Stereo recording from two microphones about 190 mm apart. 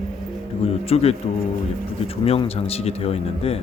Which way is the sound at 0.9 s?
30° left (ahead or behind).